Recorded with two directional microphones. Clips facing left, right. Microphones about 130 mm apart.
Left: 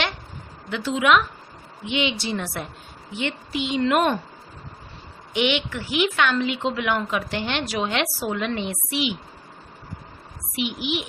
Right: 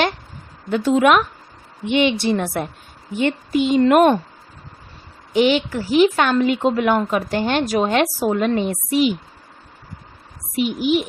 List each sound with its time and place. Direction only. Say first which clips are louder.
0.7 s speech: right 5 dB; 45° right (ahead or behind)
5.3 s speech: right 7 dB; 40° right (ahead or behind)
10.5 s speech: right 8 dB; 45° right (ahead or behind)